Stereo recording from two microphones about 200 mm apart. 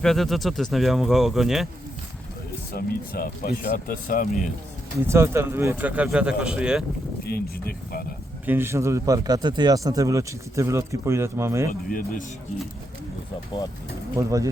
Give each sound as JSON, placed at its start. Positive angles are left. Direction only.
{"t": 0.0, "sound": "speech", "side_deg": 0}
{"t": 2.7, "sound": "speech", "side_deg": 50}
{"t": 5.0, "sound": "speech", "side_deg": -15}
{"t": 7.3, "sound": "speech", "side_deg": 50}
{"t": 8.4, "sound": "speech", "side_deg": -10}
{"t": 11.7, "sound": "speech", "side_deg": 45}
{"t": 14.2, "sound": "speech", "side_deg": -15}